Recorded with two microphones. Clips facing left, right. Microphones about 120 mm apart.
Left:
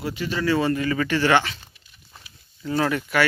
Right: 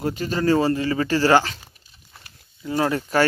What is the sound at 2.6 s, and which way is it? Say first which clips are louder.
Speech: right 1 dB; 25° right (ahead or behind).